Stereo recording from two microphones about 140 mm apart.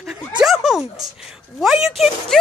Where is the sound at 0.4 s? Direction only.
Centre (ahead or behind).